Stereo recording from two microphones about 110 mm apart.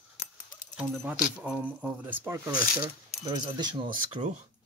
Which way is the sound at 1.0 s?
10° right (ahead or behind).